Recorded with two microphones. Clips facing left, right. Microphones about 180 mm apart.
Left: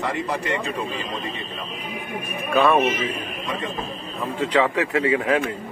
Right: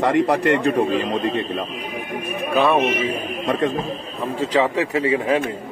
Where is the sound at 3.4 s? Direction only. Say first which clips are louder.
Right 10 dB; 60° right (ahead or behind).